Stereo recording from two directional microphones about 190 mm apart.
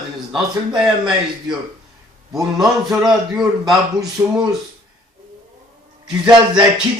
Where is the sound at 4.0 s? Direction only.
20° right (ahead or behind).